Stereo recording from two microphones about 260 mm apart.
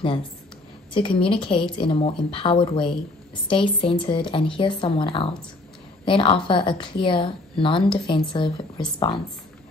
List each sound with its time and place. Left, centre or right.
0.9 s a woman's voice: centre